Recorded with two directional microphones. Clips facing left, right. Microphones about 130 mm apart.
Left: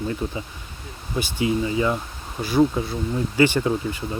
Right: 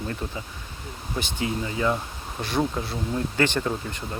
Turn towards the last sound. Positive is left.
turn(degrees=5)  # may be behind; listen again after turning